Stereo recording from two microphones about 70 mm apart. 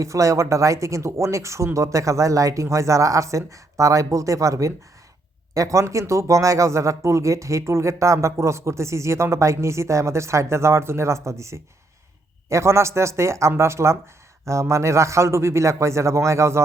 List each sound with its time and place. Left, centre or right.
0.0 s speech: right